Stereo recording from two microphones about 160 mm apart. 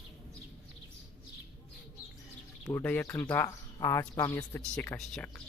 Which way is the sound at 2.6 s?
15° left (ahead or behind).